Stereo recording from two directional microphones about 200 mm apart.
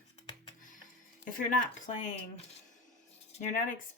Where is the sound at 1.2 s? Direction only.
40° left (ahead or behind).